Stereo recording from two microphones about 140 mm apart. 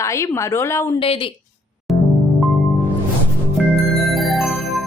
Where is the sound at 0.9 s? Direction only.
40° left (ahead or behind).